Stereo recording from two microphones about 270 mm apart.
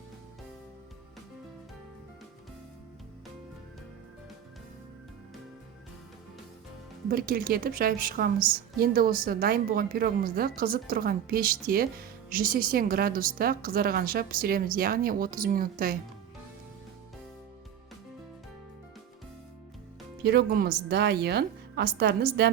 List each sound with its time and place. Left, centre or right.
7.1 s a woman's voice: right
20.2 s a woman's voice: right